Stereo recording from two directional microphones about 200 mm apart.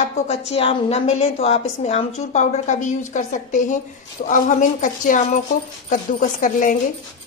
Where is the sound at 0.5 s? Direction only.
30° left (ahead or behind).